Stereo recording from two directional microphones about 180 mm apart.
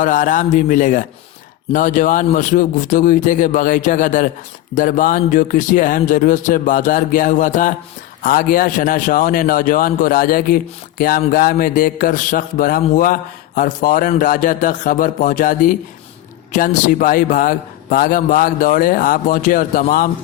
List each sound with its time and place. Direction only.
0.0 s a man's voice: 45° left (ahead or behind)